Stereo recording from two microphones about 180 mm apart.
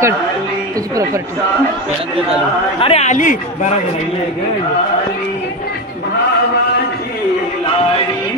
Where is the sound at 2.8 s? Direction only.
35° left (ahead or behind).